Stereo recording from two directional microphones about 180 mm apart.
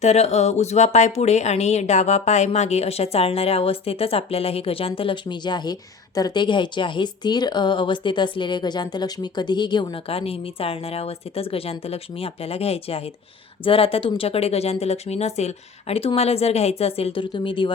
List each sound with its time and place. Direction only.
0.0 s speech: 40° left (ahead or behind)